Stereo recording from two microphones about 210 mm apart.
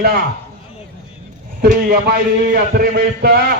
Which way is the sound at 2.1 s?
45° right (ahead or behind).